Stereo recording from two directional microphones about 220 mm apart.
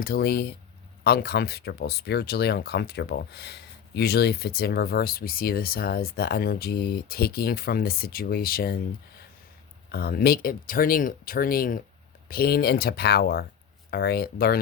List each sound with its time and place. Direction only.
0.0 s speech: 45° left (ahead or behind)
9.9 s speech: 45° left (ahead or behind)